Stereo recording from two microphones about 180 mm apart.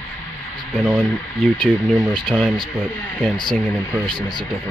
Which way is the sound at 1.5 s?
5° left (ahead or behind).